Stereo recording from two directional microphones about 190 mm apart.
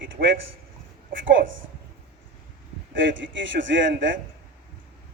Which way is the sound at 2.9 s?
75° right (ahead or behind).